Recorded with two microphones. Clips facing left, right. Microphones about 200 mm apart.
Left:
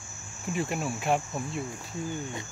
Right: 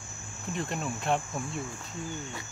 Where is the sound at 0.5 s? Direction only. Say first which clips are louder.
Left 3 dB; 5° left (ahead or behind).